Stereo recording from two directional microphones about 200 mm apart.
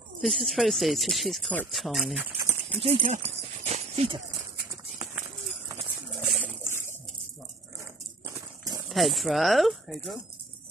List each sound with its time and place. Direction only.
0.2 s speech: centre (ahead or behind)
2.8 s horse: 30° right (ahead or behind)
6.1 s bird: 10° left (ahead or behind)
7.8 s a sound: 15° right (ahead or behind)
8.8 s speech: centre (ahead or behind)